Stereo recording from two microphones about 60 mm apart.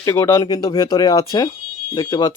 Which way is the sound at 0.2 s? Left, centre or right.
Left.